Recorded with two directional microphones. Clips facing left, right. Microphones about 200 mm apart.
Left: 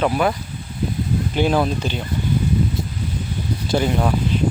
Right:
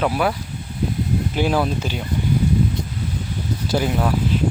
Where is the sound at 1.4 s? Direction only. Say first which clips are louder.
Left 2 dB; 5° right (ahead or behind).